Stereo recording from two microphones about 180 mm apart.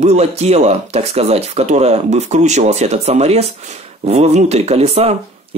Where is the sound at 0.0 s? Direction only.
35° right (ahead or behind).